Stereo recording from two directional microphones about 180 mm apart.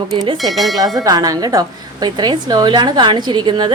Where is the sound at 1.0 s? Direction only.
20° right (ahead or behind).